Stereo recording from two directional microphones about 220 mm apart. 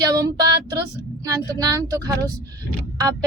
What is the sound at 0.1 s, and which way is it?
Child singing, 15° right (ahead or behind).